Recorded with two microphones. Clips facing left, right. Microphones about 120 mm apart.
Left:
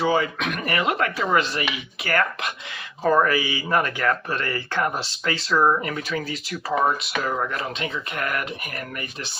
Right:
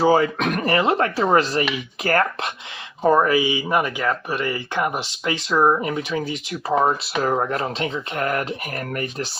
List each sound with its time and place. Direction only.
0.0 s speech: 40° right (ahead or behind)
3.0 s speech: 20° right (ahead or behind); by 9.3 s 40° right (ahead or behind)